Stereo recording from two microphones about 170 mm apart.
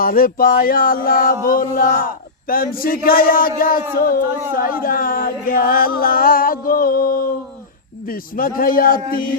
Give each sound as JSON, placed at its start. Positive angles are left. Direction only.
{"t": 0.0, "sound": "chant", "side_deg": 55}